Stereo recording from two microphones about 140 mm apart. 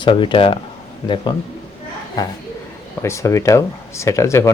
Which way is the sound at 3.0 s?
20° left (ahead or behind).